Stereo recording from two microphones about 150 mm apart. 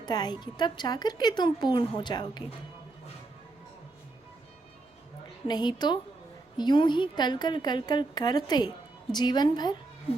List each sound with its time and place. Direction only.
0.0 s a woman's voice: 30° left (ahead or behind)
5.5 s a woman's voice: 30° left (ahead or behind)